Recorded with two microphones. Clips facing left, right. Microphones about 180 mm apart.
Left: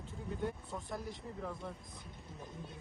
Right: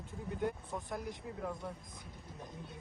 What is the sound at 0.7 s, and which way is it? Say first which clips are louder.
Speech: right 2 dB; 20° right (ahead or behind).